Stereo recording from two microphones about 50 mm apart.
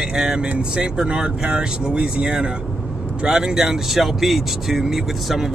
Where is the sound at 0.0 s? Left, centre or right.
Centre.